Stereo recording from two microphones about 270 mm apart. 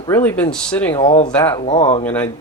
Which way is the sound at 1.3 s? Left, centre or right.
Centre.